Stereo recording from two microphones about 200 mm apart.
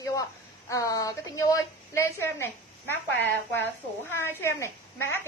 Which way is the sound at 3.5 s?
10° left (ahead or behind).